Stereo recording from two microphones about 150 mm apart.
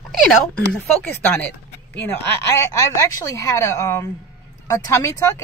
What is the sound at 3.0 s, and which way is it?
Speech, 20° left (ahead or behind).